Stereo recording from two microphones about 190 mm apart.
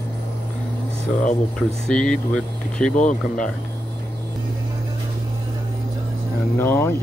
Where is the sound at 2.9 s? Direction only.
40° left (ahead or behind).